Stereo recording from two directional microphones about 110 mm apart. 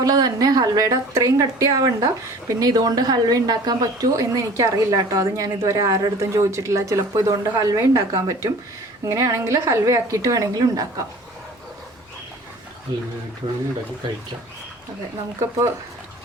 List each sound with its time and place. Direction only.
0.0 s speech: 35° right (ahead or behind)
15.4 s speech: 30° right (ahead or behind)